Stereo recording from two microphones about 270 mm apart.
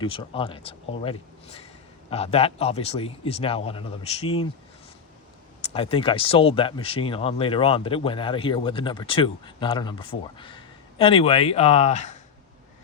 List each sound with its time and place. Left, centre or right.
0.0 s speech: centre
5.6 s speech: left